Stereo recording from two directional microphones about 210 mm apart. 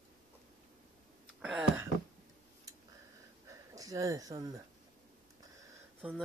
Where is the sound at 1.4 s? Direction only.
5° right (ahead or behind).